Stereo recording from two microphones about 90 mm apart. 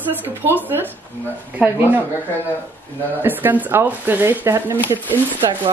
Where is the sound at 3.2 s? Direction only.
20° right (ahead or behind).